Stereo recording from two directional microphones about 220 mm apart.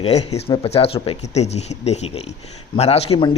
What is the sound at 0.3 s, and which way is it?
Speech, 25° left (ahead or behind).